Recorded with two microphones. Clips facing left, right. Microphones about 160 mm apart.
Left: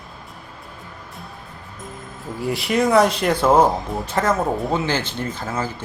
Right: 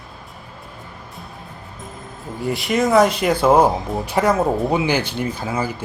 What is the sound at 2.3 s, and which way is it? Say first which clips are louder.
Speech: even; centre (ahead or behind).